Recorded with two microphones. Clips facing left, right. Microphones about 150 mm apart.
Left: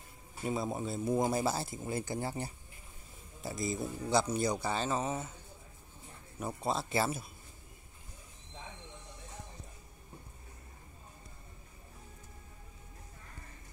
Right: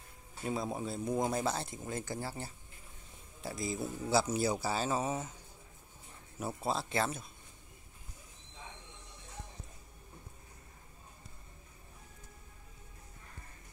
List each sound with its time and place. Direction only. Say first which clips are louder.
0.4 s speech: left 1 dB; centre (ahead or behind); by 2.5 s 15° left (ahead or behind)
3.4 s speech: left 1 dB; centre (ahead or behind)
6.4 s speech: left 1 dB; centre (ahead or behind)